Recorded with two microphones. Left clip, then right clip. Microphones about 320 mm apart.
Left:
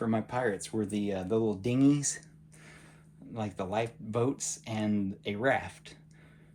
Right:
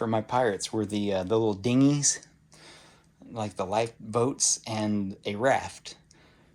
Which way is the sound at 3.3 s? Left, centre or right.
Centre.